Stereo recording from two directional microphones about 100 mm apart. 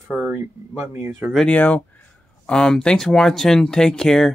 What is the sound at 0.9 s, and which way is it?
Speech, 15° right (ahead or behind).